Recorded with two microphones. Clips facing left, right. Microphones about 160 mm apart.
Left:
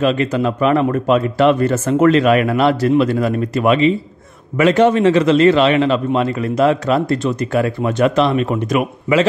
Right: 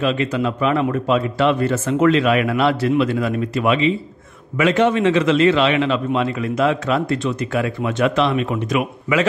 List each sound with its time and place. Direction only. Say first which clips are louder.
0.0 s a man's voice: left 3 dB; 45° left (ahead or behind)